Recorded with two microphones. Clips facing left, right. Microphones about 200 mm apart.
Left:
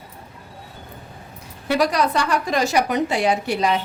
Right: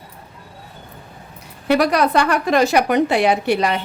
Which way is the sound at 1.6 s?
60° right (ahead or behind).